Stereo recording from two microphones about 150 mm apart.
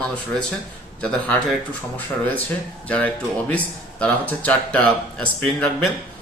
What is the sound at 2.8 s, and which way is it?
Speech, 10° left (ahead or behind).